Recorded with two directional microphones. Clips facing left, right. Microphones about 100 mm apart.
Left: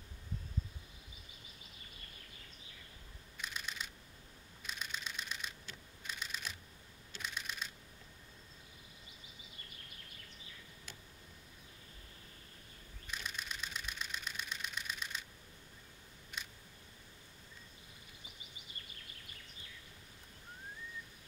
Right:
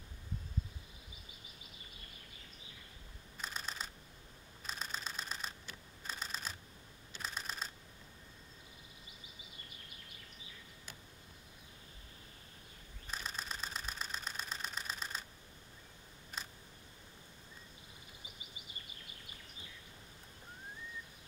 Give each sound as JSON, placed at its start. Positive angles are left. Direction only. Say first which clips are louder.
{"t": 3.3, "sound": "computer keyboard", "louder": "right 1 dB", "side_deg": -35}
{"t": 4.6, "sound": "typewriter", "louder": "right 1 dB", "side_deg": -35}
{"t": 6.0, "sound": "shuffling cards", "louder": "right 1 dB", "side_deg": -35}
{"t": 13.0, "sound": "engine knocking", "louder": "right 1 dB", "side_deg": -35}
{"t": 16.3, "sound": "camera", "louder": "right 1 dB", "side_deg": -40}